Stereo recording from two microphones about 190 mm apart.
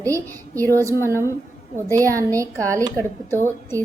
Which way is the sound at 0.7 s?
15° right (ahead or behind).